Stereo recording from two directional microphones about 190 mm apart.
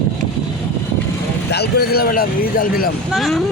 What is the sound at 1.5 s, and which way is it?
Speech, 60° left (ahead or behind).